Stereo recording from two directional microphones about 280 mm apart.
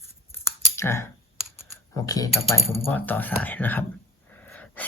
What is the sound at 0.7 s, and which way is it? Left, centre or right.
Speech, centre.